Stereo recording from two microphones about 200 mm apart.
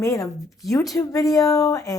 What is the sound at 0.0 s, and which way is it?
A woman's voice, 15° left (ahead or behind).